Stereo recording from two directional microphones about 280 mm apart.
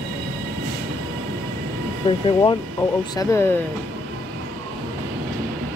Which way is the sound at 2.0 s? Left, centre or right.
Centre.